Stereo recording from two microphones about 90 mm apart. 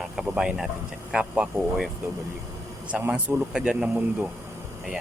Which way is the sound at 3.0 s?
20° right (ahead or behind).